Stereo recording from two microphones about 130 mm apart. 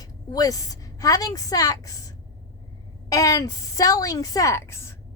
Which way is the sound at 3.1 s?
25° left (ahead or behind).